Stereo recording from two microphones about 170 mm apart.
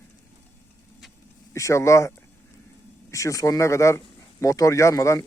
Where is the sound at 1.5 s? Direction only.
15° left (ahead or behind).